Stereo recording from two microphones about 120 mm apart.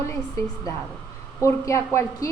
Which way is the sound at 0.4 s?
25° left (ahead or behind).